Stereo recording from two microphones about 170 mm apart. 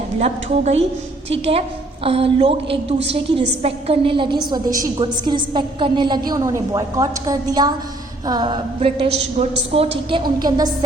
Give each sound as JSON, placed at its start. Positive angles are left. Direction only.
{"t": 0.2, "sound": "a woman's voice", "side_deg": -40}